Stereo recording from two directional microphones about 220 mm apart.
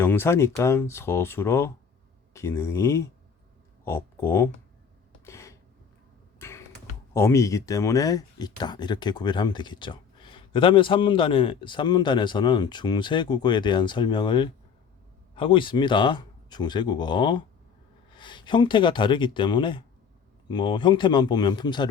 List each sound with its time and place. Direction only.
0.0 s speech: 10° left (ahead or behind)
5.2 s a sound: 15° left (ahead or behind)
6.4 s music: 10° left (ahead or behind)
7.1 s speech: 10° left (ahead or behind)